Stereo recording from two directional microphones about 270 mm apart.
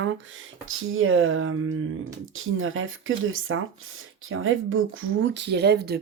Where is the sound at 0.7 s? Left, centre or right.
Right.